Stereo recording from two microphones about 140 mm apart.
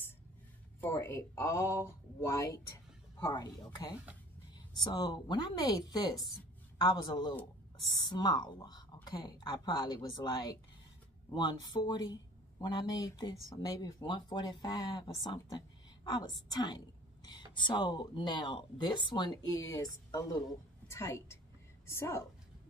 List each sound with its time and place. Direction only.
0.7 s speech: 15° left (ahead or behind)
4.9 s a woman's voice: 30° left (ahead or behind)